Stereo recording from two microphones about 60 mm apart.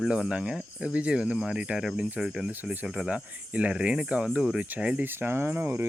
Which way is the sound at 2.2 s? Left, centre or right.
Centre.